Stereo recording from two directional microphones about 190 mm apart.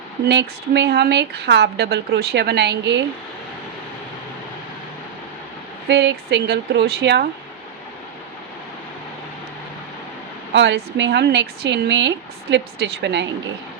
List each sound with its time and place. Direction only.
0.3 s a woman's voice: 65° right (ahead or behind)
5.9 s a woman's voice: 65° right (ahead or behind)
10.5 s speech: 70° right (ahead or behind)